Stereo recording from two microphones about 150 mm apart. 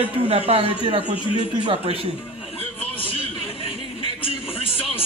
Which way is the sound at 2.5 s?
40° left (ahead or behind).